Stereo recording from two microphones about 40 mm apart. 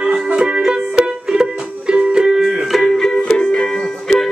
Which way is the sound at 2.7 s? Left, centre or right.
Centre.